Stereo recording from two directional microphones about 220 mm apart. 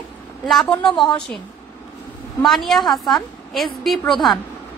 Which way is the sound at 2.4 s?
Centre (ahead or behind).